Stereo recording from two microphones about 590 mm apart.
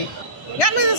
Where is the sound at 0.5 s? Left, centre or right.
Left.